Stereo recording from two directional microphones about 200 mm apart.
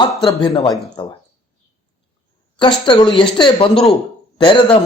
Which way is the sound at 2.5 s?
25° left (ahead or behind).